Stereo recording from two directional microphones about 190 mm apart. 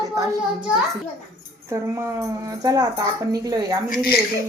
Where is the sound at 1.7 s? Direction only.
15° right (ahead or behind).